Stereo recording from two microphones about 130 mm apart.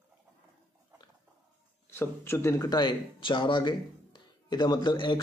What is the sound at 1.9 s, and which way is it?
Speech, 20° left (ahead or behind).